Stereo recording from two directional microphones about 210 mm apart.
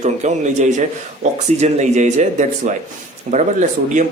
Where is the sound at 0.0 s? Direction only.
35° right (ahead or behind).